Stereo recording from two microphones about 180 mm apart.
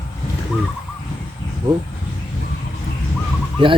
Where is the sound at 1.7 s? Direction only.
20° right (ahead or behind).